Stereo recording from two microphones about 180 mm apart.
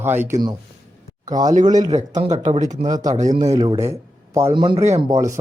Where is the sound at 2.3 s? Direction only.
40° right (ahead or behind).